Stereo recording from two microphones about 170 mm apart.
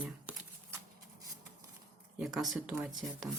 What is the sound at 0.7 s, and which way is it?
Shuffling cards, 20° right (ahead or behind).